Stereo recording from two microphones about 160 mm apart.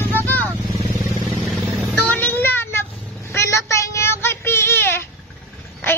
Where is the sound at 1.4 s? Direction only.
5° left (ahead or behind).